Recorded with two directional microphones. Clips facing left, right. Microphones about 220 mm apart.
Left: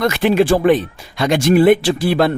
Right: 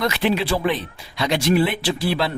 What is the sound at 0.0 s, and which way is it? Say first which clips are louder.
Speech: left 7 dB; 50° left (ahead or behind).